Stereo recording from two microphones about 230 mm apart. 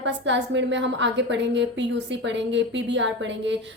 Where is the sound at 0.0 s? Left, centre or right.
Right.